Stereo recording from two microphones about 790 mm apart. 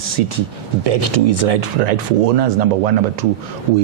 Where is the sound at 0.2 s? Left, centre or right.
Right.